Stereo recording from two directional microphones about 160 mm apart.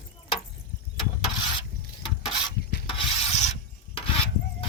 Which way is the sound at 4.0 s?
35° left (ahead or behind).